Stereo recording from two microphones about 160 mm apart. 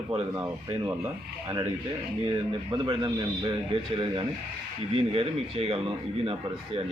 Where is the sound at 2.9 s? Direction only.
30° right (ahead or behind).